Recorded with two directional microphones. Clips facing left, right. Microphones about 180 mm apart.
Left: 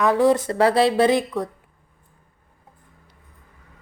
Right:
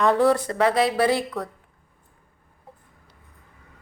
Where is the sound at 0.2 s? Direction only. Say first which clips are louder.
Left 2 dB; 20° left (ahead or behind).